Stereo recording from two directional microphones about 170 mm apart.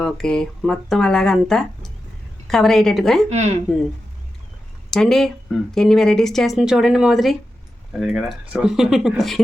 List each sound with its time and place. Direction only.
0.0 s speech: 5° left (ahead or behind)
3.2 s speech: 40° right (ahead or behind)
4.9 s speech: 5° left (ahead or behind)